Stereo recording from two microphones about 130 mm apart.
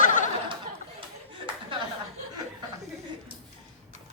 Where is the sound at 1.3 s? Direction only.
40° right (ahead or behind).